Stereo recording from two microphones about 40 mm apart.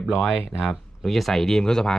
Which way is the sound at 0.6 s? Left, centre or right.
Centre.